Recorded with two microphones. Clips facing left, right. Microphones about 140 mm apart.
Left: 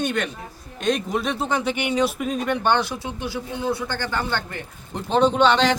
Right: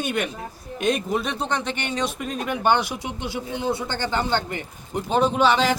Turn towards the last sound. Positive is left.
turn(degrees=-5)  # may be behind; listen again after turning